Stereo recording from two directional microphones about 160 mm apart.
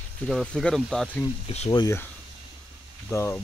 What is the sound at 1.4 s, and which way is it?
Speech, 45° left (ahead or behind).